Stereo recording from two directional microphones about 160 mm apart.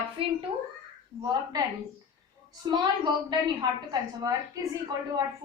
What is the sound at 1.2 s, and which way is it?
Speech, 25° right (ahead or behind).